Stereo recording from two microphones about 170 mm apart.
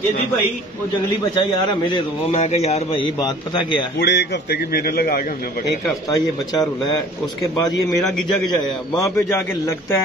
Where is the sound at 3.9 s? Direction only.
75° left (ahead or behind).